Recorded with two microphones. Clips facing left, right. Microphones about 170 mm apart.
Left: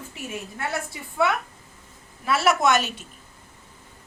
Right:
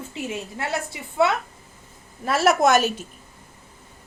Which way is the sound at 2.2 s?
45° right (ahead or behind).